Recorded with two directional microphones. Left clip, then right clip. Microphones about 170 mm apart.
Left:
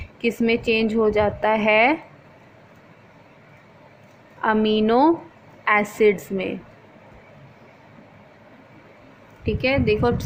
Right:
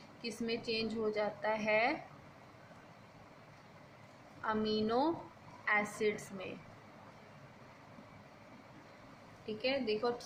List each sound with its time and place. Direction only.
0.2 s a woman's voice: 50° left (ahead or behind)
4.4 s a woman's voice: 50° left (ahead or behind)
9.6 s a woman's voice: 55° left (ahead or behind)